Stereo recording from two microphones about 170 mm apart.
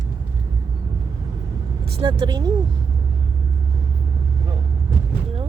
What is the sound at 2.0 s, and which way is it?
Vehicle, 25° right (ahead or behind).